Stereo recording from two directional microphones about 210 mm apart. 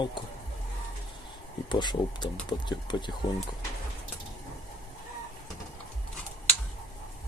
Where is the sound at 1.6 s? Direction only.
20° left (ahead or behind).